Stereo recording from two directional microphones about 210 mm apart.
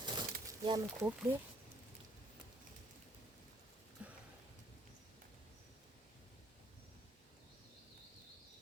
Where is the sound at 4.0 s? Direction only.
5° right (ahead or behind).